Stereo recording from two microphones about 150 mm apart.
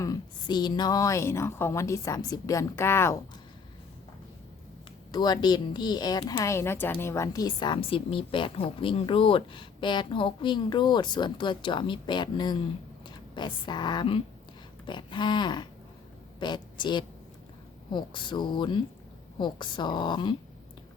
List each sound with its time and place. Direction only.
0.0 s speech: 25° left (ahead or behind)
5.1 s a woman's voice: 30° left (ahead or behind)